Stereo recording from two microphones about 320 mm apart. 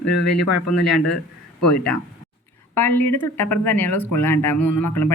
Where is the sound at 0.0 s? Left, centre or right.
Left.